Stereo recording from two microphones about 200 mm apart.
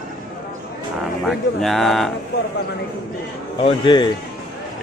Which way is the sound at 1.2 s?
Centre (ahead or behind).